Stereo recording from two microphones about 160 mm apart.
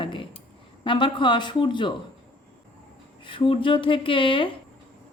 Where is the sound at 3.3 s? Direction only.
35° left (ahead or behind).